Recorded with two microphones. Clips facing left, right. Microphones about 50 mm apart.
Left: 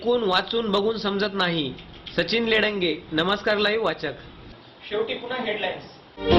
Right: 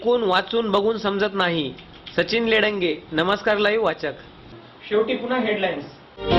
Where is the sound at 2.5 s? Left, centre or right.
Right.